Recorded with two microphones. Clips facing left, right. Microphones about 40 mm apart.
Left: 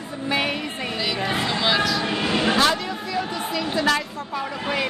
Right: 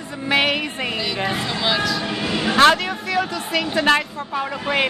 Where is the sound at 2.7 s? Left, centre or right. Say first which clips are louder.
Right 5 dB; right.